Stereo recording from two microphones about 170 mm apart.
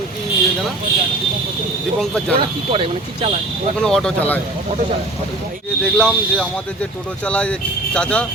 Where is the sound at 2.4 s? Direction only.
35° right (ahead or behind).